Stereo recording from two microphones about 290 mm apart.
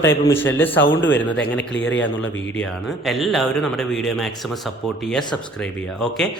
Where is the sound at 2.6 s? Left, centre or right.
Centre.